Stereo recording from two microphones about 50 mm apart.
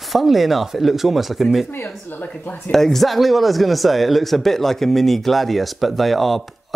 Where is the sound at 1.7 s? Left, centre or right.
Left.